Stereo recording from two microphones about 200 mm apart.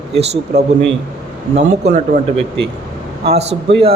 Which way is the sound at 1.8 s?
40° right (ahead or behind).